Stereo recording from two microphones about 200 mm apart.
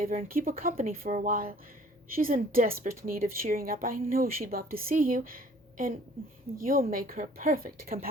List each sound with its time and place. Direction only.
0.0 s a woman's voice: 45° right (ahead or behind)